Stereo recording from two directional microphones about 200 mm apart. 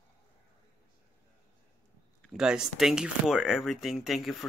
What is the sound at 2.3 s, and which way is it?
Speech, 5° right (ahead or behind).